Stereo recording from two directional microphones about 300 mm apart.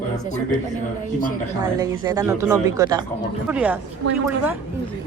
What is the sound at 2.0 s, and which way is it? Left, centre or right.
Speech, centre.